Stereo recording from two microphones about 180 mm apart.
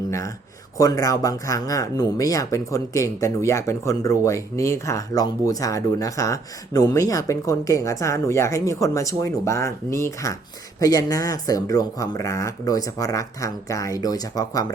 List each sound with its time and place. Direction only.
0.8 s speech: 20° left (ahead or behind)